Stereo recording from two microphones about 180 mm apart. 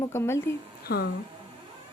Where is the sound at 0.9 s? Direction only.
55° left (ahead or behind).